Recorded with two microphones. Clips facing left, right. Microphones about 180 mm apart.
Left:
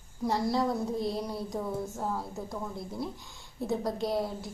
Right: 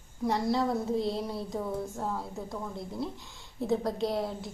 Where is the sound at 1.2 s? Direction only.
Centre (ahead or behind).